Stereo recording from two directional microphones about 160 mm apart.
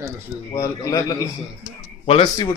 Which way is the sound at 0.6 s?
20° left (ahead or behind).